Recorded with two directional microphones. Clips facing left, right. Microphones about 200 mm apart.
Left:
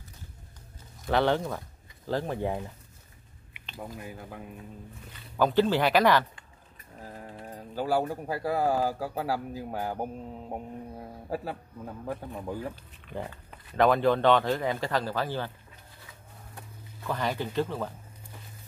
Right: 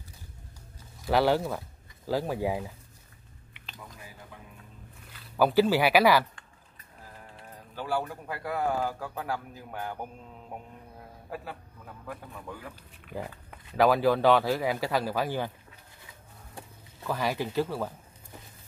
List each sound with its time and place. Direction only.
1.0 s speech: 5° right (ahead or behind)
3.8 s speech: 55° left (ahead or behind)
5.1 s speech: 5° right (ahead or behind)
7.0 s pigeon: 40° left (ahead or behind)
8.1 s speech: 35° left (ahead or behind)
13.0 s speech: 5° right (ahead or behind)
17.0 s speech: 10° right (ahead or behind)